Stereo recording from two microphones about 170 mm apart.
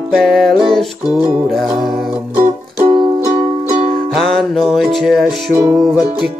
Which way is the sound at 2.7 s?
30° right (ahead or behind).